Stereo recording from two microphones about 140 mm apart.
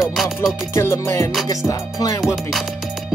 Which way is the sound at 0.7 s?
20° left (ahead or behind).